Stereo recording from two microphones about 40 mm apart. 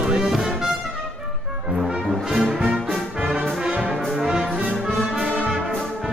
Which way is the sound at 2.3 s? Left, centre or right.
Centre.